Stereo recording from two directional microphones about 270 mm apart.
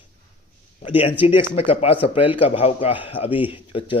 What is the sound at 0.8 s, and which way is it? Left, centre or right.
Speech, left.